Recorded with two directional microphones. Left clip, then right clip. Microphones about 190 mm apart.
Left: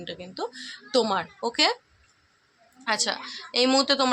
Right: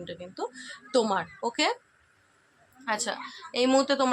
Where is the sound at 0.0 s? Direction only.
15° left (ahead or behind).